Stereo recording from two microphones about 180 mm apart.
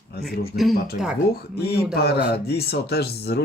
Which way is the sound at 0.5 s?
55° left (ahead or behind).